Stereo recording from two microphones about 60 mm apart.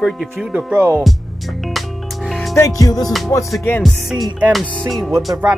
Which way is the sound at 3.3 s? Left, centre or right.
Left.